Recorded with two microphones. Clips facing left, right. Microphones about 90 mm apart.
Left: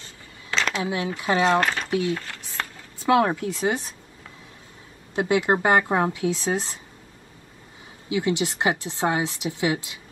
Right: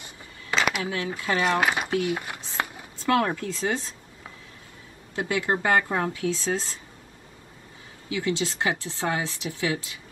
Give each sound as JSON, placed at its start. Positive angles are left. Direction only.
{"t": 0.0, "sound": "a sound", "side_deg": -10}
{"t": 0.7, "sound": "a woman's voice", "side_deg": 20}
{"t": 1.6, "sound": "speech", "side_deg": -10}
{"t": 2.0, "sound": "a sound", "side_deg": -15}
{"t": 3.0, "sound": "a woman's voice", "side_deg": 20}
{"t": 5.1, "sound": "a woman's voice", "side_deg": 20}
{"t": 8.1, "sound": "a woman's voice", "side_deg": 20}